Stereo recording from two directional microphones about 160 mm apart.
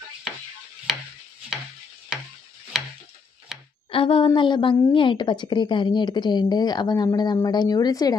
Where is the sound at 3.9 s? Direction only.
35° left (ahead or behind).